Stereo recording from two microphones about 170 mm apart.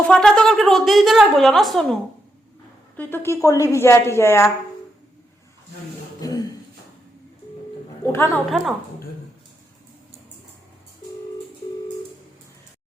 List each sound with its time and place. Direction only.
0.1 s a woman's voice: centre (ahead or behind)
3.0 s a woman's voice: 15° left (ahead or behind)
6.1 s a sound: 20° left (ahead or behind)
8.0 s a woman's voice: 15° left (ahead or behind)
8.4 s a woman's voice: centre (ahead or behind)